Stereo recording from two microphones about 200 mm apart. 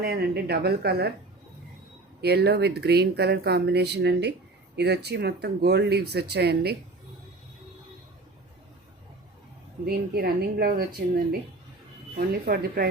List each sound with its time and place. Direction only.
0.0 s speech: 50° right (ahead or behind)
2.2 s speech: 55° right (ahead or behind)
9.8 s speech: 50° right (ahead or behind)